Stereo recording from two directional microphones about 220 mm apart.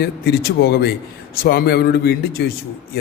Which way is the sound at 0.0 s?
45° left (ahead or behind).